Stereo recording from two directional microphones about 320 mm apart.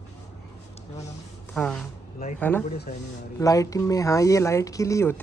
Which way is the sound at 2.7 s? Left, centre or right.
Left.